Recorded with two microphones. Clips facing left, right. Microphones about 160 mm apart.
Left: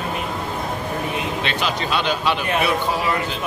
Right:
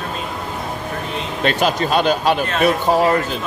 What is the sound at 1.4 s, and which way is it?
Speech, 45° right (ahead or behind).